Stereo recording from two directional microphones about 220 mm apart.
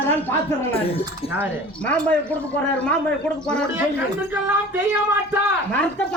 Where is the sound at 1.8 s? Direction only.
5° left (ahead or behind).